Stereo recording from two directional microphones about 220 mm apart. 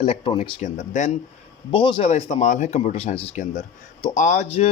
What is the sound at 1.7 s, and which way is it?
Speech, 20° left (ahead or behind).